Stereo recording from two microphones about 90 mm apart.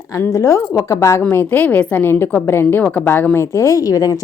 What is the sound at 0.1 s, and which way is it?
A woman's voice, 35° left (ahead or behind).